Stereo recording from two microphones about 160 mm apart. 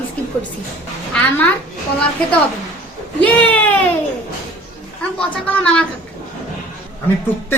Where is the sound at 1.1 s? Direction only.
10° left (ahead or behind).